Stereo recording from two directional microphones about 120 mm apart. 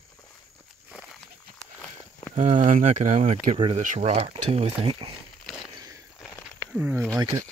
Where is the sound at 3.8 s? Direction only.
80° right; by 5.1 s 55° right (ahead or behind).